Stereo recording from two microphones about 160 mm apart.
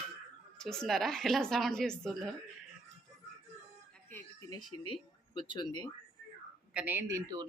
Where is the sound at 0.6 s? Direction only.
5° left (ahead or behind).